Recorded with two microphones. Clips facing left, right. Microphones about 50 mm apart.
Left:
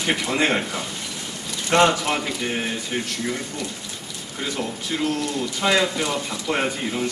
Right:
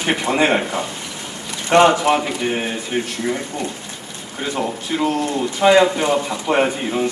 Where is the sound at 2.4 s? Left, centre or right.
Centre.